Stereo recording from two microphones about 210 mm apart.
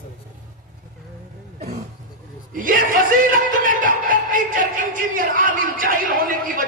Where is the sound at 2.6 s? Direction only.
40° right (ahead or behind).